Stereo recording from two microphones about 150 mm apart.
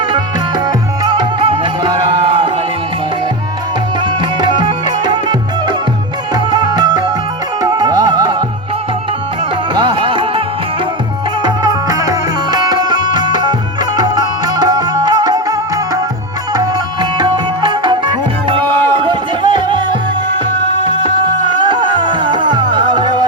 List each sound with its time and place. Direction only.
0.1 s music: 25° right (ahead or behind)
4.0 s music: 30° right (ahead or behind)
9.7 s music: 35° right (ahead or behind)
11.4 s music: 30° right (ahead or behind)
21.6 s music: 30° right (ahead or behind)